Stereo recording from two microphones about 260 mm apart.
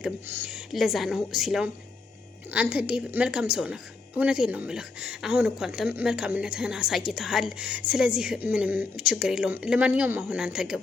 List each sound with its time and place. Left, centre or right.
0.0 s a woman's voice: centre